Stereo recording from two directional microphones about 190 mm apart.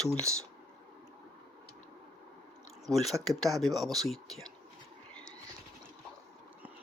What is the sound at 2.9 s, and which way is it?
Speech, centre (ahead or behind).